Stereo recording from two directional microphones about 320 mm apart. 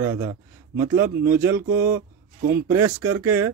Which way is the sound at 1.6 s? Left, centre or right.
Right.